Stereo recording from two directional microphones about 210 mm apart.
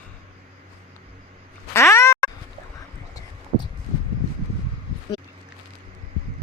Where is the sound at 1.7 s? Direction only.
10° left (ahead or behind).